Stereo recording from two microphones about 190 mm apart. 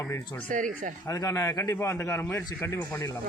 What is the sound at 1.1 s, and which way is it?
A man's voice, 20° left (ahead or behind).